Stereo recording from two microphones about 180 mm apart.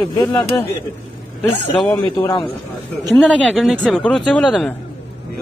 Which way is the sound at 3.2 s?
5° left (ahead or behind).